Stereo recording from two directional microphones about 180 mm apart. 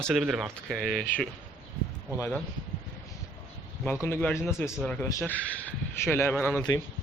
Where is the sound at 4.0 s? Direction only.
10° left (ahead or behind).